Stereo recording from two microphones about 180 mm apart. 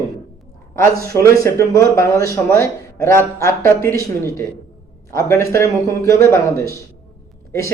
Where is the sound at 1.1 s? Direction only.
15° left (ahead or behind).